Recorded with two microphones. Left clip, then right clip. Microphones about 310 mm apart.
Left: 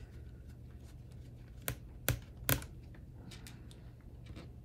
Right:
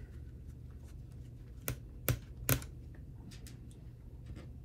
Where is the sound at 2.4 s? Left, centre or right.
Centre.